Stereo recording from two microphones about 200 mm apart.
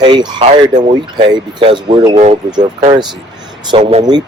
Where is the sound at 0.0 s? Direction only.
25° right (ahead or behind).